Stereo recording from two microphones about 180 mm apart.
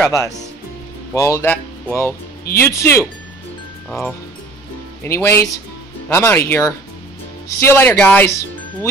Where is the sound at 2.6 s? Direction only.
15° left (ahead or behind).